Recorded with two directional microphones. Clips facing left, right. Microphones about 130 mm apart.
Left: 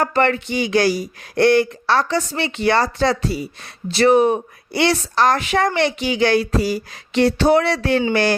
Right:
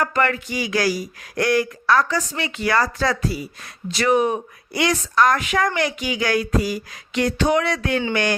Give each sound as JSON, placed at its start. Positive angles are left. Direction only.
{"t": 0.0, "sound": "speech", "side_deg": 30}